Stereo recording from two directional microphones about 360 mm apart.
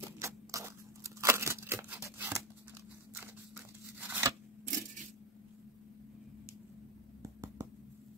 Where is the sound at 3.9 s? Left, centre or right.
Centre.